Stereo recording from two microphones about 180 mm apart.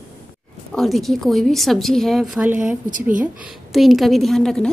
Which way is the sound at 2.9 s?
45° right (ahead or behind).